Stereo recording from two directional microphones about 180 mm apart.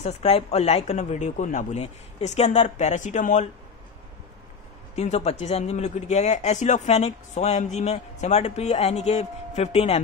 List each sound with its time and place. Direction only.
0.0 s speech: 35° left (ahead or behind)
4.9 s speech: 40° left (ahead or behind)